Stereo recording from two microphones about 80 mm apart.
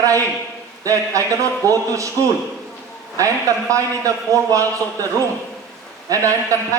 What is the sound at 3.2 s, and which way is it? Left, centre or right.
A man's voice, right.